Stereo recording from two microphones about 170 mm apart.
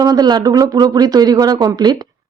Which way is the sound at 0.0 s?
25° right (ahead or behind).